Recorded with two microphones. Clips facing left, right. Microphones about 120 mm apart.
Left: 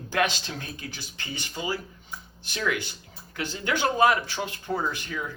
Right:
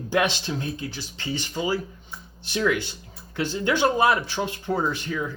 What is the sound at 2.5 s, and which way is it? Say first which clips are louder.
Speech: right 5 dB; 25° right (ahead or behind).